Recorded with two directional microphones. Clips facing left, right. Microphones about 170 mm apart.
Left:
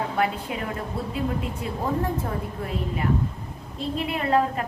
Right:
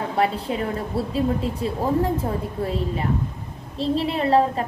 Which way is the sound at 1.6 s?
30° right (ahead or behind).